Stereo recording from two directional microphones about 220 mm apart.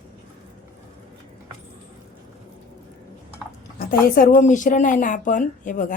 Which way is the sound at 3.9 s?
40° left (ahead or behind).